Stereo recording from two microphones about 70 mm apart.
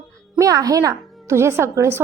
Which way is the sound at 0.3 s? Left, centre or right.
Right.